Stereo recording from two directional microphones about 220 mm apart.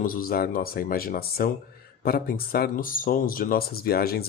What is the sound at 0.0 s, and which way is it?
Speech, 40° left (ahead or behind).